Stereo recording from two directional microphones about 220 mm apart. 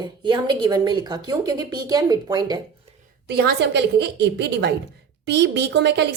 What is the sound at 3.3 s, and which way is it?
Speech, 50° right (ahead or behind).